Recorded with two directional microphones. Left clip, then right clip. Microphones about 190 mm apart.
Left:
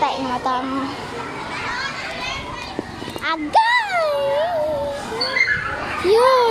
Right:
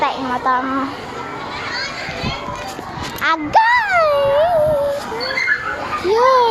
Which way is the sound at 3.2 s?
15° right (ahead or behind).